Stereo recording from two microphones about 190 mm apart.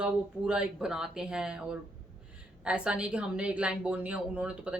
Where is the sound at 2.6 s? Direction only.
5° right (ahead or behind).